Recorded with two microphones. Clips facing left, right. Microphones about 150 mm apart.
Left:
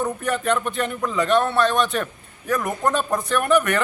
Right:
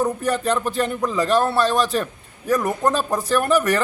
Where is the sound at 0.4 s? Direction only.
35° right (ahead or behind).